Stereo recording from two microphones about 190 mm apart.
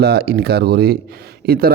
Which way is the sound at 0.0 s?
55° right (ahead or behind).